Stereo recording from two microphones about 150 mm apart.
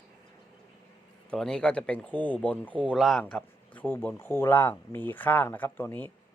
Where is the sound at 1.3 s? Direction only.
5° left (ahead or behind).